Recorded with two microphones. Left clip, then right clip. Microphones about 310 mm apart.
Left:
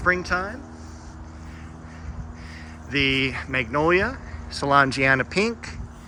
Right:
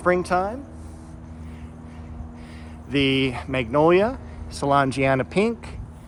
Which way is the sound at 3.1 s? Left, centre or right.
Centre.